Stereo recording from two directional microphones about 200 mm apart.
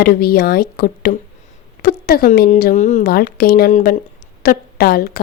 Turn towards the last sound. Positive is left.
turn(degrees=50)  # may be behind; listen again after turning